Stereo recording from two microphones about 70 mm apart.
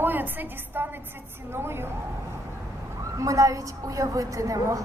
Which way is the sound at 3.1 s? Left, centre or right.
Right.